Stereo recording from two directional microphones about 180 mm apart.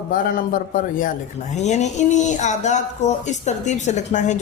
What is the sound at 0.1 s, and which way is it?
A woman's voice, 50° left (ahead or behind).